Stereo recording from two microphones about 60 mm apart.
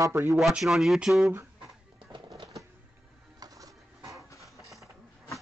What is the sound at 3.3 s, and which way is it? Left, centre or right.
Music, right.